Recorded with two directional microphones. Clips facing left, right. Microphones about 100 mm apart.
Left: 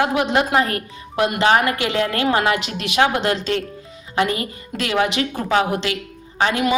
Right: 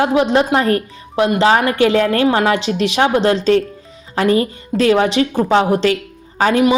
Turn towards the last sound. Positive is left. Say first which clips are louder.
# right 6 dB
turn(degrees=-40)  # may be behind; listen again after turning